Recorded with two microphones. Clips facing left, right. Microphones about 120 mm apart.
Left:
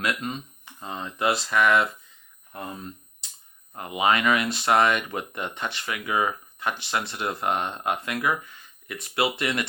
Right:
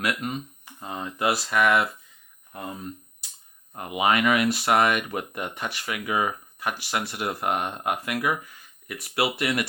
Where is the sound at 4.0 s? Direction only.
25° left (ahead or behind).